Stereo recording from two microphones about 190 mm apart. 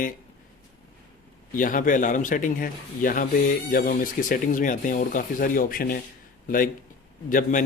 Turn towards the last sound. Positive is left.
turn(degrees=45)  # may be behind; listen again after turning